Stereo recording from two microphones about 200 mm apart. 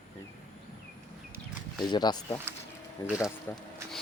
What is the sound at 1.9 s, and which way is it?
Speech, 20° left (ahead or behind).